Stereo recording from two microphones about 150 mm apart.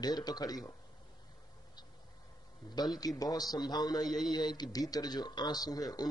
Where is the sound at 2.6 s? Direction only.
30° left (ahead or behind).